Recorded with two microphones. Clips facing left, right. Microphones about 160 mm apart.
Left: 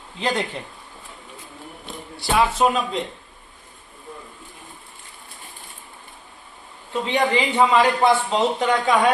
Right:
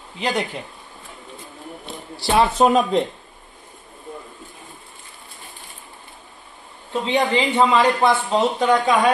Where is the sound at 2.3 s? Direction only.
35° right (ahead or behind).